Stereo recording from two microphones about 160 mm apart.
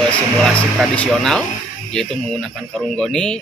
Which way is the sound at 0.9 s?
5° left (ahead or behind).